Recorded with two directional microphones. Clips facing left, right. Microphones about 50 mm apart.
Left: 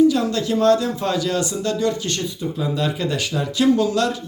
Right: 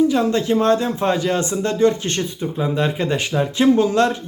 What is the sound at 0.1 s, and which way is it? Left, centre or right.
Speech, right.